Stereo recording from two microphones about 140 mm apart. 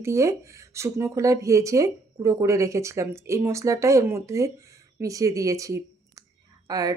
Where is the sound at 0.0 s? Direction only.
20° right (ahead or behind).